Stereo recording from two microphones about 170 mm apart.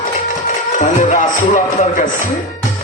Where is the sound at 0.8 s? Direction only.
45° left (ahead or behind).